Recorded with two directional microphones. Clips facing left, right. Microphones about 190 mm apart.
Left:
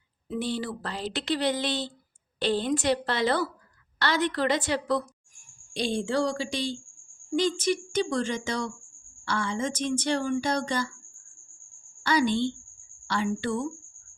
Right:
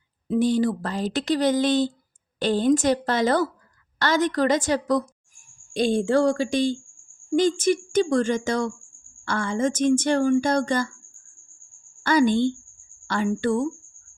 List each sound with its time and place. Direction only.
0.3 s a woman's voice: 45° right (ahead or behind)
12.0 s a woman's voice: 50° right (ahead or behind)